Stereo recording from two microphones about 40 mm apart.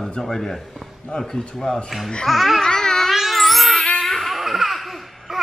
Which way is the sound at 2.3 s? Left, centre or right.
Centre.